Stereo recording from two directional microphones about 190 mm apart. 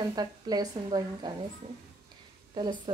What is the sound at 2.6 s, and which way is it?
Speech, 25° right (ahead or behind).